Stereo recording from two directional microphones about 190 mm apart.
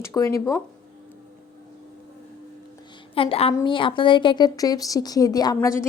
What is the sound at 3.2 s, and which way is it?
A woman's voice, 30° left (ahead or behind).